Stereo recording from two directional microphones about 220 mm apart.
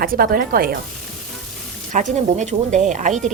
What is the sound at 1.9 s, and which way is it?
Speech, 35° right (ahead or behind).